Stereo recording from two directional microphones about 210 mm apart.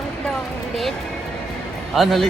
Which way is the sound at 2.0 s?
Centre (ahead or behind).